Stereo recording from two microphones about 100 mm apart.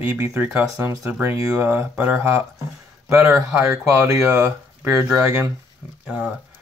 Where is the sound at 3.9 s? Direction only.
25° right (ahead or behind).